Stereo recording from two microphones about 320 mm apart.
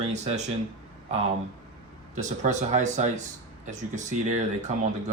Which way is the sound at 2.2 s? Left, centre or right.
Right.